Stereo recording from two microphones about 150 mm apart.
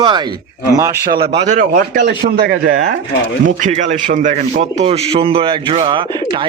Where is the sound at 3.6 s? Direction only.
55° right (ahead or behind).